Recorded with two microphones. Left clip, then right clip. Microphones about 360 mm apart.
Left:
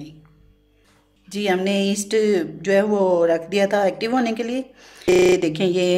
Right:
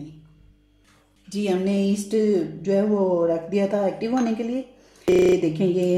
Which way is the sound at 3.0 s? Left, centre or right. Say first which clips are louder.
Left 4 dB; left.